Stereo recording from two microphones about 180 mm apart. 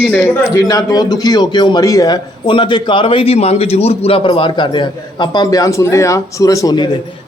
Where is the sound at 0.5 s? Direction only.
20° left (ahead or behind).